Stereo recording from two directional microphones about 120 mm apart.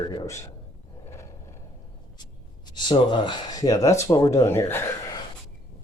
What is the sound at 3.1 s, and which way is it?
Speech, 40° left (ahead or behind).